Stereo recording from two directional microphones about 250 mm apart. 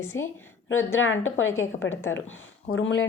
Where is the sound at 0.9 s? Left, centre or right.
Left.